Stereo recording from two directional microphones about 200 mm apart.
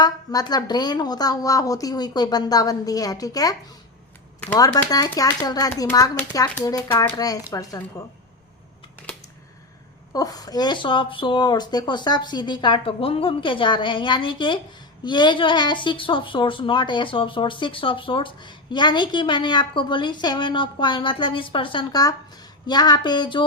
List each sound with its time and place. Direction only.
0.0 s a woman's voice: 20° left (ahead or behind)
4.5 s a child's voice: 20° left (ahead or behind)
10.1 s a woman's voice: 20° left (ahead or behind)